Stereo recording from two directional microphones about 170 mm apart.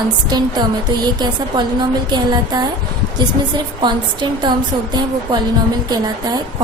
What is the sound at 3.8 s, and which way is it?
A woman's voice, 30° right (ahead or behind).